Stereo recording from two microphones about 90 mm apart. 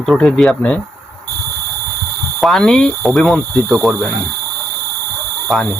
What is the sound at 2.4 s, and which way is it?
Speech, 5° left (ahead or behind).